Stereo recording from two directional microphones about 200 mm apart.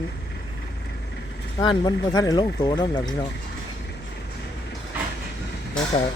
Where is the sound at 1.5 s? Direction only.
25° left (ahead or behind).